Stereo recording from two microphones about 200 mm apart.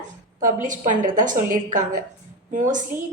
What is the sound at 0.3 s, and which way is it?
A woman's voice, 40° right (ahead or behind).